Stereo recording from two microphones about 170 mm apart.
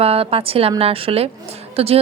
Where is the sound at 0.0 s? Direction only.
35° right (ahead or behind).